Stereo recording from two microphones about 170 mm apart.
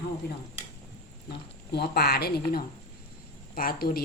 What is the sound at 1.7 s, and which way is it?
Speech, 70° left (ahead or behind).